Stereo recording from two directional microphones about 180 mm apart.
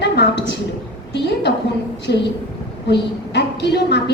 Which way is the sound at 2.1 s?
70° left (ahead or behind).